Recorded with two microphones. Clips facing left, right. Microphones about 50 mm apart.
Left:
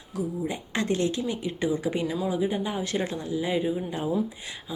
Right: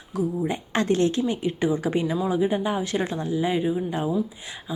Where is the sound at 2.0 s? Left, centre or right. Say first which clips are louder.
Right 4 dB; centre.